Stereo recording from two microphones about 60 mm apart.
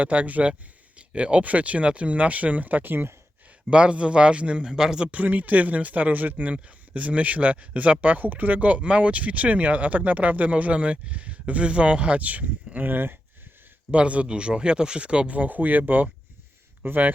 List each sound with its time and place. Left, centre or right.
0.0 s speech: right
3.7 s speech: centre
5.1 s speech: right
13.9 s speech: right